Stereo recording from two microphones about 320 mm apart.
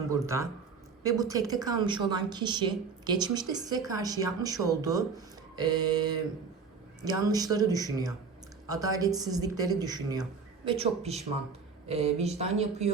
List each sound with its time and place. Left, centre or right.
0.1 s a woman's voice: centre